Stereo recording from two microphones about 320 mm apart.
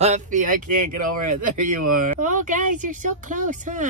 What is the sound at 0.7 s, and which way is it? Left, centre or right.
Speech, right.